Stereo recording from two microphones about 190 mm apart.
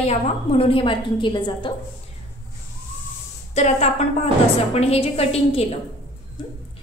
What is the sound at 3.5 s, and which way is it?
A woman's voice, 35° left (ahead or behind).